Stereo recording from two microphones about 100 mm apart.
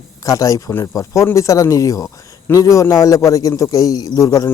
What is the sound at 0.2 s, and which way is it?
A man's voice, 35° left (ahead or behind).